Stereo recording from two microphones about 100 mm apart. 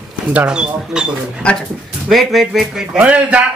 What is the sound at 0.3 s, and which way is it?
Speech, 10° right (ahead or behind).